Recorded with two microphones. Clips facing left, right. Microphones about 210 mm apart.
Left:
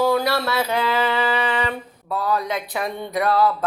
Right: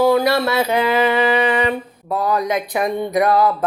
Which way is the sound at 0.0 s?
10° right (ahead or behind).